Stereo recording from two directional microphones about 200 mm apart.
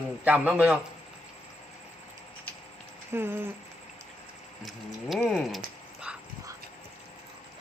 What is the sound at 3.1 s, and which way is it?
Speech, 10° right (ahead or behind).